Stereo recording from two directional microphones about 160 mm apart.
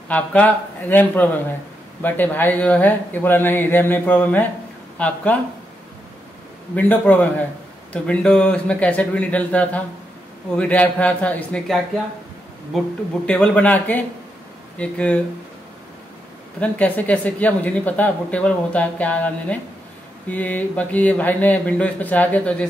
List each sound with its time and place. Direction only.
0.1 s speech: 10° left (ahead or behind)
6.7 s speech: 10° left (ahead or behind)
16.5 s speech: 10° left (ahead or behind)